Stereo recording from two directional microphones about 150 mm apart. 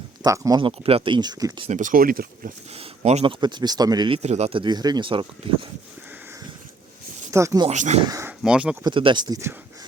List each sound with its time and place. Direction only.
0.2 s speech: 25° right (ahead or behind)
0.6 s speech: 40° right (ahead or behind)
1.7 s speech: 60° right (ahead or behind)
2.7 s a sound: 45° right (ahead or behind)
3.4 s speech: 30° right (ahead or behind)
4.2 s speech: 45° right (ahead or behind)
7.3 s speech: 20° right (ahead or behind)
7.7 s speech: 50° right (ahead or behind)
8.0 s speech: 20° right (ahead or behind)
8.3 s speech: 5° right (ahead or behind)
8.8 s speech: 35° right (ahead or behind)